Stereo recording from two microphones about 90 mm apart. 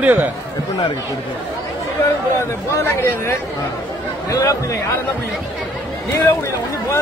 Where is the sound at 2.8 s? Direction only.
25° left (ahead or behind).